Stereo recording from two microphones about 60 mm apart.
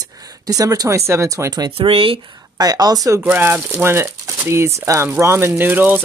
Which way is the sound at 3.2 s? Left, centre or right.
Right.